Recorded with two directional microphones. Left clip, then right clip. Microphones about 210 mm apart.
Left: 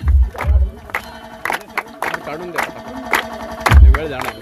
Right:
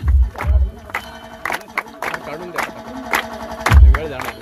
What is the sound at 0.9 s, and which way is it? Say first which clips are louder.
Music: left 2 dB; 45° left (ahead or behind).